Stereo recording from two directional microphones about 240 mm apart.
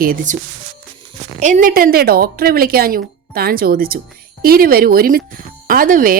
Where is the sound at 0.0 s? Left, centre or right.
Right.